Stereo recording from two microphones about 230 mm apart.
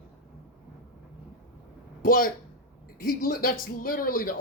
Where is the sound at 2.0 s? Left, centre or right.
Left.